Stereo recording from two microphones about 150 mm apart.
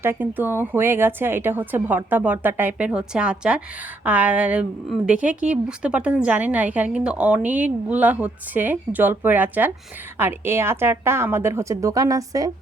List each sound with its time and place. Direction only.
0.0 s a woman's voice: 15° right (ahead or behind)